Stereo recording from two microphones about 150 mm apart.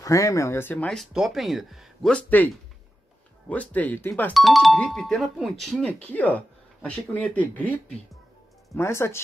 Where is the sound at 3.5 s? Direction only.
10° left (ahead or behind).